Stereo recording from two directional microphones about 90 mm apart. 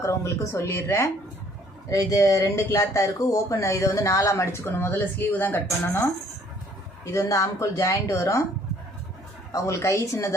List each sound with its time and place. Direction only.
0.0 s speech: 35° left (ahead or behind)
7.0 s speech: 35° left (ahead or behind)
9.5 s speech: 35° left (ahead or behind)